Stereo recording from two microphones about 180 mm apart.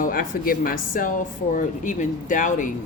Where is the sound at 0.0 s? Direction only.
50° left (ahead or behind).